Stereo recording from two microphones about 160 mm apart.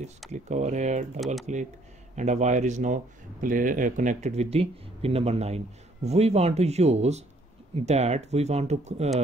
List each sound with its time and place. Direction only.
0.3 s a man's voice: 45° right (ahead or behind)
1.2 s speech: centre (ahead or behind)
2.1 s a man's voice: 45° right (ahead or behind)